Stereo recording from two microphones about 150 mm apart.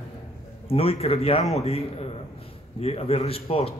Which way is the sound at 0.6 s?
40° left (ahead or behind).